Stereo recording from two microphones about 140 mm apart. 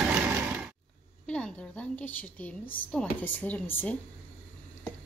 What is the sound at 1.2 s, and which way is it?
A woman's voice, 5° left (ahead or behind).